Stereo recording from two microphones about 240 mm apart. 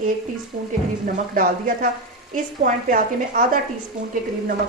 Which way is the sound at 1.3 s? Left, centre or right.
Right.